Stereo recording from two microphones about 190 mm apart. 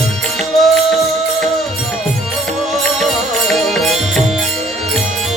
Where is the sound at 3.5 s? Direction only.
Centre (ahead or behind).